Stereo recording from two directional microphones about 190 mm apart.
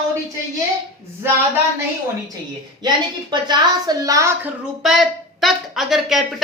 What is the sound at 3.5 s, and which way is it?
A woman's voice, 20° right (ahead or behind).